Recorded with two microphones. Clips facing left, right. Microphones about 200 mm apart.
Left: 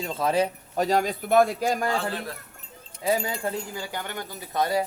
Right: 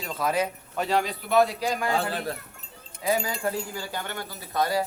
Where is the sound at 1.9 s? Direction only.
35° right (ahead or behind).